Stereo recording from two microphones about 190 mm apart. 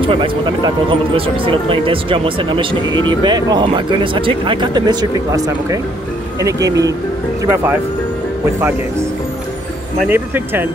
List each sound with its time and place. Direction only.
0.0 s speech: 25° right (ahead or behind); by 7.8 s 10° right (ahead or behind)
10.0 s speech: 10° right (ahead or behind)